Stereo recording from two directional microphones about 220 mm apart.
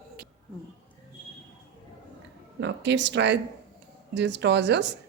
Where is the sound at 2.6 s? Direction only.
55° right (ahead or behind).